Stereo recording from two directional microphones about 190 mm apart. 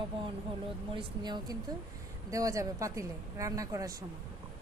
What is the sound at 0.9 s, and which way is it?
A woman's voice, 20° right (ahead or behind).